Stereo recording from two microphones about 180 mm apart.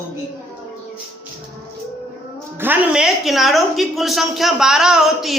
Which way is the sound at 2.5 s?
10° right (ahead or behind).